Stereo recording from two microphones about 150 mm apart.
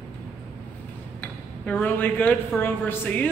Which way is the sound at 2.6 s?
10° left (ahead or behind).